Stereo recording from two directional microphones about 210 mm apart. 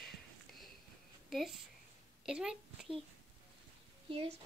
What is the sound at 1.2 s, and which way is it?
A woman's voice, centre (ahead or behind).